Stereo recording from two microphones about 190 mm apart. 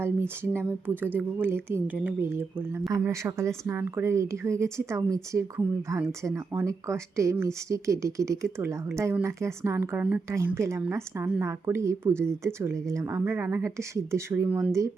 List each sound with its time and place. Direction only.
0.5 s speech: 10° right (ahead or behind)